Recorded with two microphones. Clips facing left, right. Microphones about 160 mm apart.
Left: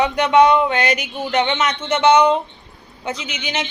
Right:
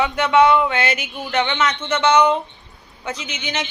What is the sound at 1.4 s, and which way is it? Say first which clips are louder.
Speech: left 1 dB; 30° left (ahead or behind).